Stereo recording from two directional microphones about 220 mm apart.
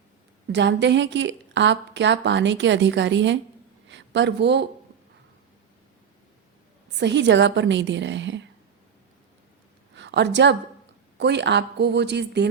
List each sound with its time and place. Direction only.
0.5 s a woman's voice: 50° right (ahead or behind)
3.8 s a sound: 55° right (ahead or behind)
7.0 s a woman's voice: 50° right (ahead or behind)
9.9 s a woman's voice: 55° right (ahead or behind)